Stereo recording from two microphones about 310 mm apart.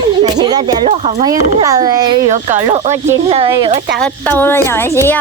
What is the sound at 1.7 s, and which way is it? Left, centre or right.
Speech, centre.